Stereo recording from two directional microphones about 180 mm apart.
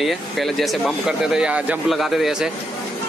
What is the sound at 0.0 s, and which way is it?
Speech, centre (ahead or behind).